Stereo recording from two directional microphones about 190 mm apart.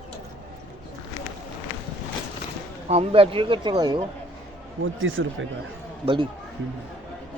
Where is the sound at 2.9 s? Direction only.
30° right (ahead or behind).